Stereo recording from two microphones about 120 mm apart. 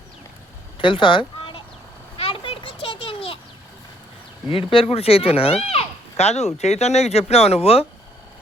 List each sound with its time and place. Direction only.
0.8 s a sound: 45° left (ahead or behind)
2.1 s children playing: 50° left (ahead or behind)
4.4 s speech: 50° left (ahead or behind)